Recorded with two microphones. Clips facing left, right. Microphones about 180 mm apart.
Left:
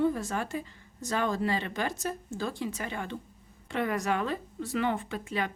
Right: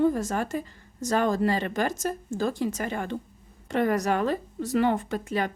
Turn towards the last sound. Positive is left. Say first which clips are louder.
# right 5 dB
turn(degrees=-40)  # may be behind; listen again after turning